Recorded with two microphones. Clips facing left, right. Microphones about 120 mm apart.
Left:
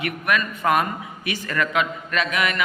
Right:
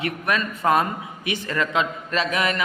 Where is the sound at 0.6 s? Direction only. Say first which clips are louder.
Right 1 dB; 15° right (ahead or behind).